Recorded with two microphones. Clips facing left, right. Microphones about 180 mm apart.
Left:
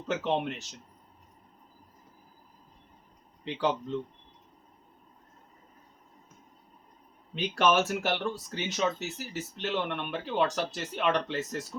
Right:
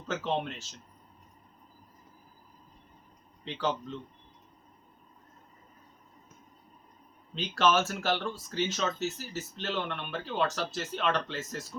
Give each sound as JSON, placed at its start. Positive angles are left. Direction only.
{"t": 0.1, "sound": "speech", "side_deg": 20}
{"t": 3.4, "sound": "speech", "side_deg": 15}
{"t": 7.3, "sound": "speech", "side_deg": 15}